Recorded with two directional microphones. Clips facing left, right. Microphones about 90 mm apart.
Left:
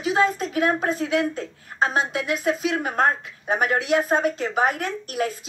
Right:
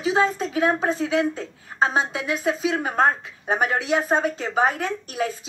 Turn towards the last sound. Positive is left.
turn(degrees=-25)  # may be behind; listen again after turning